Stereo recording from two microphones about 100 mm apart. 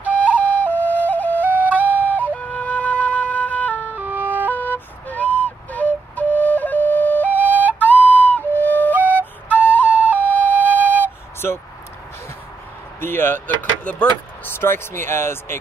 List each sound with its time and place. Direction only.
0.0 s flute: 15° right (ahead or behind)
0.7 s flute: 15° left (ahead or behind)
1.5 s flute: 15° right (ahead or behind)
2.1 s flute: 15° left (ahead or behind)
3.9 s emergency vehicle: 20° right (ahead or behind)
4.6 s flute: 20° left (ahead or behind)
7.2 s flute: 15° right (ahead or behind)
7.8 s flute: 15° left (ahead or behind)
9.8 s flute: 15° right (ahead or behind)
13.0 s a sound: 20° left (ahead or behind)
13.6 s speech: 15° left (ahead or behind)